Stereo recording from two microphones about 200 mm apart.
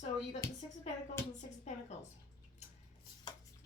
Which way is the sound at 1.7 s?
35° left (ahead or behind).